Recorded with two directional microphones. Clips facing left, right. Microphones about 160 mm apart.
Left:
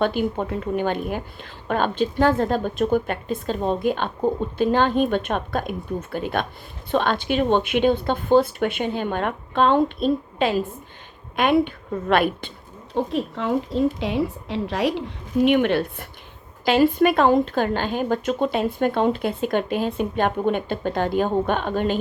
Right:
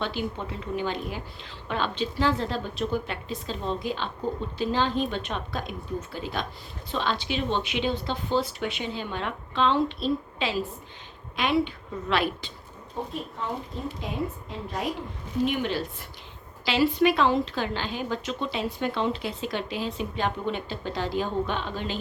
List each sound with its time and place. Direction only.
0.0 s a woman's voice: 50° left (ahead or behind)
12.9 s a woman's voice: 90° left
15.4 s a woman's voice: 65° left (ahead or behind)